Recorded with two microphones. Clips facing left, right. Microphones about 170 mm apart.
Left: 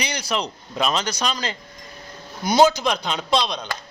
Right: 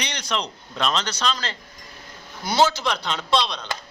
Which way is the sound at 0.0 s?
10° left (ahead or behind).